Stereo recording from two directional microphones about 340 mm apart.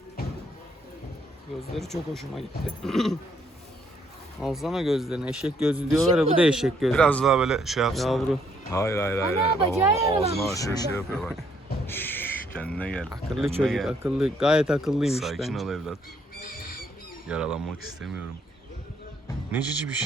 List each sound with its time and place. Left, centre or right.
1.7 s speech: centre
4.4 s speech: centre
9.6 s speech: centre
10.4 s speech: centre
11.9 s a sound: centre
13.1 s speech: centre
16.4 s owl: left
17.2 s speech: centre